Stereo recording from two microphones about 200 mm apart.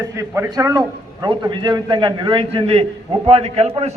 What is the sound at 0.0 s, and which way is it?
A man's voice, 15° right (ahead or behind).